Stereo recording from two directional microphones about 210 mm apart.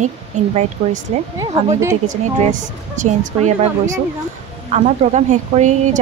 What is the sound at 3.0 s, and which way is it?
A woman's voice, 35° right (ahead or behind).